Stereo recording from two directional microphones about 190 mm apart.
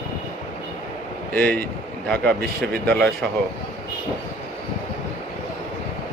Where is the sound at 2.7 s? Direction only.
55° right (ahead or behind).